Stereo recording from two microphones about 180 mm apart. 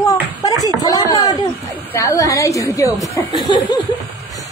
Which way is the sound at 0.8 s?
20° left (ahead or behind).